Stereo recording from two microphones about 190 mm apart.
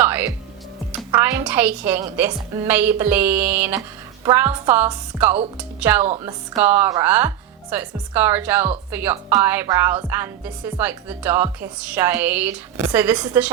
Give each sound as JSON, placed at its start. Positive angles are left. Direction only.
{"t": 0.0, "sound": "music", "side_deg": -10}
{"t": 1.1, "sound": "a woman's voice", "side_deg": -10}